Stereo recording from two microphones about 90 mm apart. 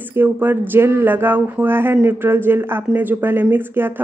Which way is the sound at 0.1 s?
20° right (ahead or behind).